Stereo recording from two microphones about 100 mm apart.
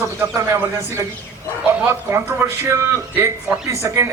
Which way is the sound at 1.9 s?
25° right (ahead or behind).